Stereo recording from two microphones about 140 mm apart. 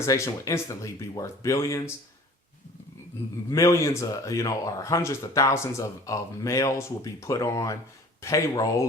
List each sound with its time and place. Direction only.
0.0 s speech: 20° left (ahead or behind)
3.5 s speech: 20° left (ahead or behind)